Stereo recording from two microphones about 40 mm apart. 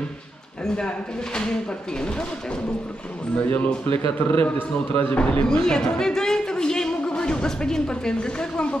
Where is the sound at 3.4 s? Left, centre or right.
Left.